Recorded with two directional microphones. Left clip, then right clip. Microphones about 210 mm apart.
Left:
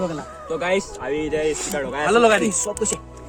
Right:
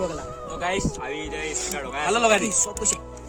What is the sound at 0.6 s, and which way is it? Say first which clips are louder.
Speech: left 3 dB; 20° right (ahead or behind).